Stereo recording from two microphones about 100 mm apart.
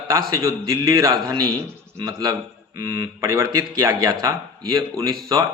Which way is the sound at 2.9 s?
25° right (ahead or behind).